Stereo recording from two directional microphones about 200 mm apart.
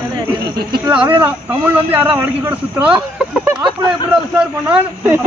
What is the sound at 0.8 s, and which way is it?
Speech, 10° right (ahead or behind).